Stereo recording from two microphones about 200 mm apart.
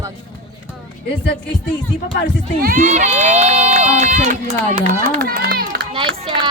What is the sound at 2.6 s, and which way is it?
Speech, 45° right (ahead or behind).